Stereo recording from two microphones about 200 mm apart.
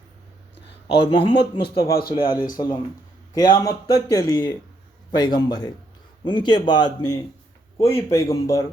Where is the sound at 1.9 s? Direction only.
50° left (ahead or behind).